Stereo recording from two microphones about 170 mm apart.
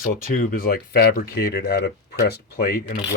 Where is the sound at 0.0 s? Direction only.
55° left (ahead or behind).